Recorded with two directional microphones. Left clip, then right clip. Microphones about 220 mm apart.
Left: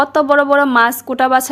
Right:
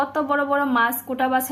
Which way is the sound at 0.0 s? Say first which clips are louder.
Left 10 dB; 50° left (ahead or behind).